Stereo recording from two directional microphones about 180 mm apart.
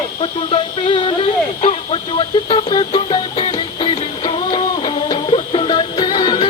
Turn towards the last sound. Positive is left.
turn(degrees=25)  # may be behind; listen again after turning